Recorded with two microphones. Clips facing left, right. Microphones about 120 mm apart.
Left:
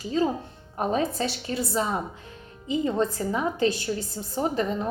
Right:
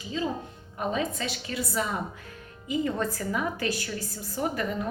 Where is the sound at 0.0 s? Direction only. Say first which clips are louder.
Left 6 dB; 40° left (ahead or behind).